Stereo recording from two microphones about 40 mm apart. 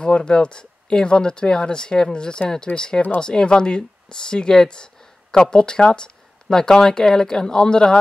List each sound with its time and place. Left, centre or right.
0.0 s speech: left